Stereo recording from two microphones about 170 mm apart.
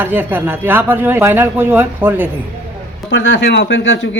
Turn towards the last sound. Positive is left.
turn(degrees=90)